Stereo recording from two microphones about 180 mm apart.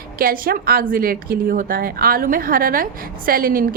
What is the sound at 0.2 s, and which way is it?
A woman's voice, 55° right (ahead or behind).